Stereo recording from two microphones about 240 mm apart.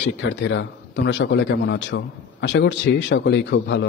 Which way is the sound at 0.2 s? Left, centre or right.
Left.